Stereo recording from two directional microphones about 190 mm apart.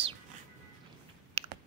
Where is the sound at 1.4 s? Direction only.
30° right (ahead or behind).